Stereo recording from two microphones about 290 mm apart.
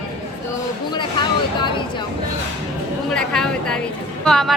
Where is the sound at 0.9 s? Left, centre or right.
Centre.